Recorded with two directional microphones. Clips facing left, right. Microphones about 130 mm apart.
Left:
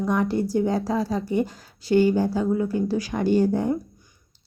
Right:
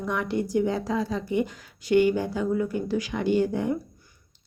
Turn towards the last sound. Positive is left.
turn(degrees=35)  # may be behind; listen again after turning